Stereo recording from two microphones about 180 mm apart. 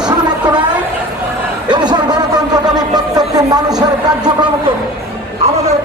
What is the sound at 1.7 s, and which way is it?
Music, 25° right (ahead or behind).